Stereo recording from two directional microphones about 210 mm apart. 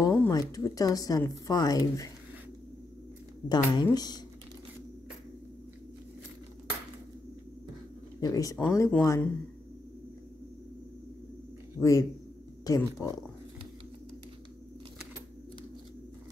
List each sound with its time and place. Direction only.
0.0 s speech: 15° left (ahead or behind)
3.4 s a woman's voice: 20° left (ahead or behind)
8.2 s speech: 15° left (ahead or behind)
11.8 s speech: 15° left (ahead or behind)